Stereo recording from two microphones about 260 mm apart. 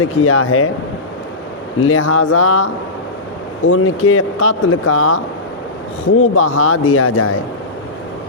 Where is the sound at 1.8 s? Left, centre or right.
Left.